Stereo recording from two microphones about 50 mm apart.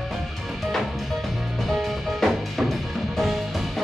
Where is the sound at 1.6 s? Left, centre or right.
Centre.